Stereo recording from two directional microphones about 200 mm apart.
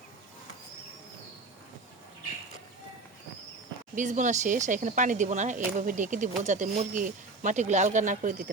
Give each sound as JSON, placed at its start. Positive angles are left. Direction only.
{"t": 3.9, "sound": "speech", "side_deg": -40}